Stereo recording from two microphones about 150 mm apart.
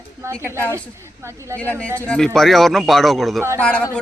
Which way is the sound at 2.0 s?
5° left (ahead or behind).